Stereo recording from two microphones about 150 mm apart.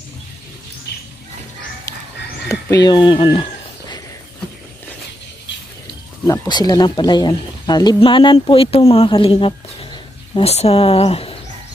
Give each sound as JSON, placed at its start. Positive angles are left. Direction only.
{"t": 1.9, "sound": "a sound", "side_deg": 25}
{"t": 2.4, "sound": "speech", "side_deg": 25}
{"t": 6.2, "sound": "speech", "side_deg": 25}